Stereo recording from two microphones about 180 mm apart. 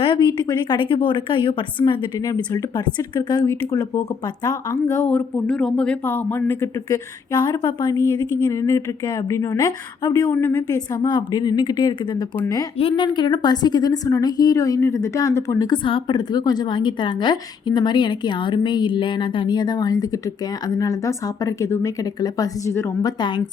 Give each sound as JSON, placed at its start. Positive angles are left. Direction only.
{"t": 0.0, "sound": "a woman's voice", "side_deg": 25}
{"t": 5.1, "sound": "a woman's voice", "side_deg": 5}